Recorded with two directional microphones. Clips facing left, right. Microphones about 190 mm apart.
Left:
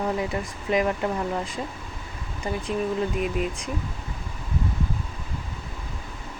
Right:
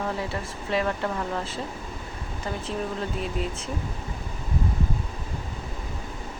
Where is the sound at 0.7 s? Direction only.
15° left (ahead or behind).